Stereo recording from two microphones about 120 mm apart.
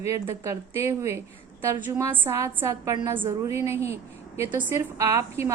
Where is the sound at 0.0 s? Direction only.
25° right (ahead or behind).